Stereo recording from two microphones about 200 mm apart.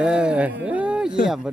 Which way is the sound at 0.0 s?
5° right (ahead or behind).